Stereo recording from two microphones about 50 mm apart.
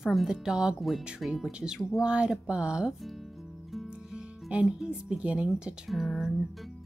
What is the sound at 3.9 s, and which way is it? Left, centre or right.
Music, centre.